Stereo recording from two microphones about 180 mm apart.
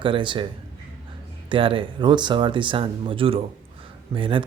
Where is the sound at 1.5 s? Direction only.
30° right (ahead or behind).